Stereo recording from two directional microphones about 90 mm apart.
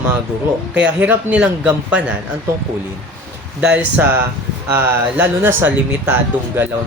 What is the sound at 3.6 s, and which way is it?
Speech, 15° right (ahead or behind).